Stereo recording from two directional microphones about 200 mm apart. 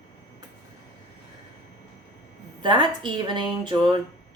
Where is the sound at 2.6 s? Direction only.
25° right (ahead or behind).